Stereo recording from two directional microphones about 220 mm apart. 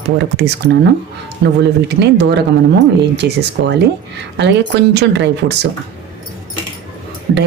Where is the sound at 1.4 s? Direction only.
50° right (ahead or behind).